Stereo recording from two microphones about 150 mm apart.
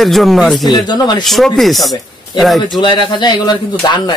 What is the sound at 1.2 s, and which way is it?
Speech, centre (ahead or behind).